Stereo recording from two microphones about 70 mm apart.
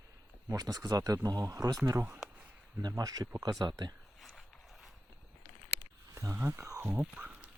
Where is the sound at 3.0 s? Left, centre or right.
Right.